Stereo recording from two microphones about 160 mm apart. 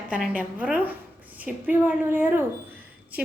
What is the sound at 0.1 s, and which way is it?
A woman's voice, 10° right (ahead or behind).